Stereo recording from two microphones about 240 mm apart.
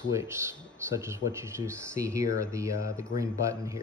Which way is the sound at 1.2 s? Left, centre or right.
Left.